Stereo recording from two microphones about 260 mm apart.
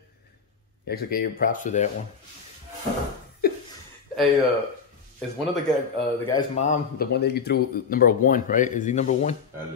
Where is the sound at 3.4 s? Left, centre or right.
Left.